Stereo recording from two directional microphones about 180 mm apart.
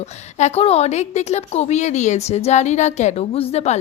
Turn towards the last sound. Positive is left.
turn(degrees=35)  # may be behind; listen again after turning